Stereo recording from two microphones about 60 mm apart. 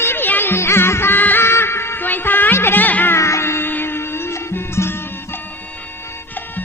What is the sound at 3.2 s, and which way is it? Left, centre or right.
Music, left.